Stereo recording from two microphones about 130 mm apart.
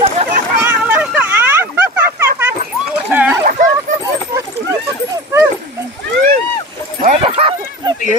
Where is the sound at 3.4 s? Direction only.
90° right.